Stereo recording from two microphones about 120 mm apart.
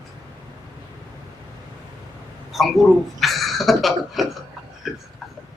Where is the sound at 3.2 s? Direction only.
Centre (ahead or behind).